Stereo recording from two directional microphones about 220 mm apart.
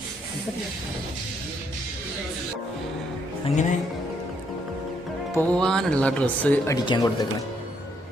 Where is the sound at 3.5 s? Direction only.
30° left (ahead or behind).